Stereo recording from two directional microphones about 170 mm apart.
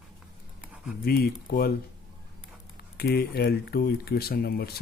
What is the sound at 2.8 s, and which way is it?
Speech, 70° left (ahead or behind).